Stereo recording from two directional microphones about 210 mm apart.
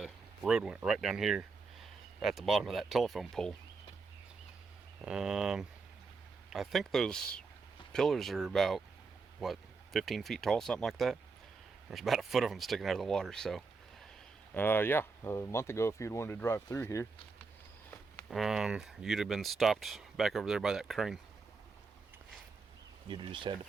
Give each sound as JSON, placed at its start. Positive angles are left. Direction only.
{"t": 0.0, "sound": "speech", "side_deg": -5}
{"t": 5.0, "sound": "speech", "side_deg": -5}
{"t": 17.9, "sound": "a sound", "side_deg": 10}
{"t": 18.3, "sound": "speech", "side_deg": 0}
{"t": 23.0, "sound": "speech", "side_deg": -25}